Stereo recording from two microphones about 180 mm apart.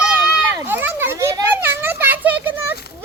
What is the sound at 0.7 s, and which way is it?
Children playing, 10° right (ahead or behind).